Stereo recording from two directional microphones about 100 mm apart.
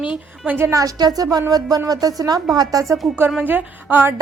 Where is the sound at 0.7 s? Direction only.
35° right (ahead or behind).